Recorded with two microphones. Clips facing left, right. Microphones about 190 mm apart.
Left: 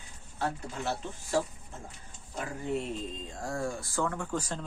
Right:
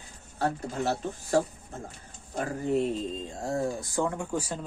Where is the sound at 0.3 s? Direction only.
40° right (ahead or behind).